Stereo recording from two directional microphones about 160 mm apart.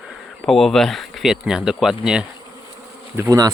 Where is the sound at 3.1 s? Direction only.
20° right (ahead or behind).